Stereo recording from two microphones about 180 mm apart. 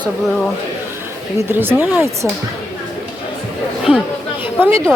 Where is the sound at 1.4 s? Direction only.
10° right (ahead or behind).